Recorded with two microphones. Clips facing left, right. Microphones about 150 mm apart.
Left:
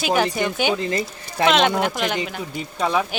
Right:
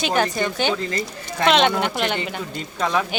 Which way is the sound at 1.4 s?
Centre (ahead or behind).